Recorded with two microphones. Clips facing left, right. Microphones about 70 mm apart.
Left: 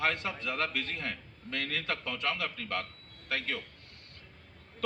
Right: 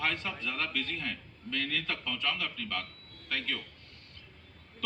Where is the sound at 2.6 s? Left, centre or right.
Left.